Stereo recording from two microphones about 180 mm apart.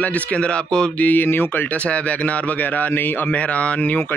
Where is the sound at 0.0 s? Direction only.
10° left (ahead or behind).